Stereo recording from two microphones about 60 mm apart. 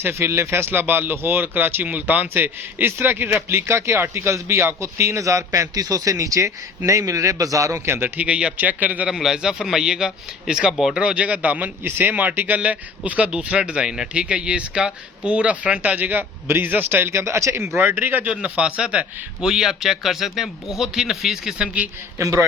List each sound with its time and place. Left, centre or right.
0.0 s speech: right
0.7 s speech: right
3.7 s a man's voice: right
7.9 s speech: right
8.1 s speech: right
9.0 s a man's voice: centre
11.0 s speech: right
17.7 s speech: right
18.3 s a man's voice: centre
22.2 s a man's voice: right